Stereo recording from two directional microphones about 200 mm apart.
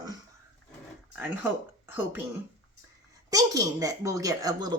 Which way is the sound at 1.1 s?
10° right (ahead or behind).